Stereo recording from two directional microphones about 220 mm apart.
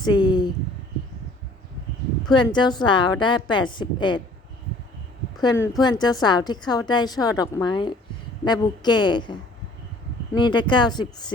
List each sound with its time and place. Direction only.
0.0 s a sound: 20° left (ahead or behind)
2.3 s a woman's voice: 20° left (ahead or behind)
5.4 s a woman's voice: 15° left (ahead or behind)
10.3 s a woman's voice: 20° left (ahead or behind)